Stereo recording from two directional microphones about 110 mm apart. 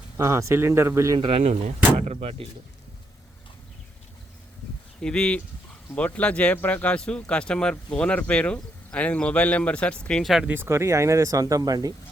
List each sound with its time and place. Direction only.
0.2 s speech: 25° right (ahead or behind)
1.2 s speech: 70° right (ahead or behind)
5.0 s speech: 10° left (ahead or behind)
10.4 s speech: 20° right (ahead or behind); by 11.9 s 35° right (ahead or behind)